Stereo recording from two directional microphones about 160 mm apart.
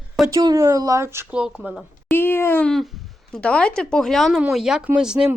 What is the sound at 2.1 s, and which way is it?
Speech, 15° left (ahead or behind).